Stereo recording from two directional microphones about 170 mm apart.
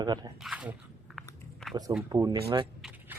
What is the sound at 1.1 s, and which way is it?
Biting, centre (ahead or behind).